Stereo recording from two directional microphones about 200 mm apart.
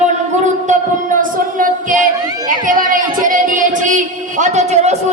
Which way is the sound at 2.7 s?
45° right (ahead or behind).